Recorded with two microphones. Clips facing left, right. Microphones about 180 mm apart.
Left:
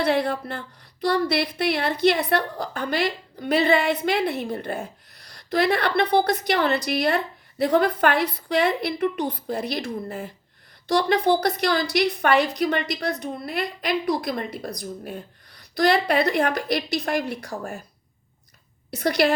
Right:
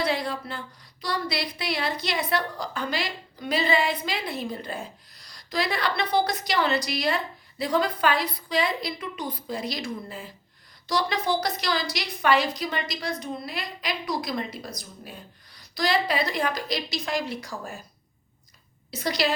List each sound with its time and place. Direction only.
0.0 s a woman's voice: 60° left (ahead or behind)
18.9 s a woman's voice: 65° left (ahead or behind)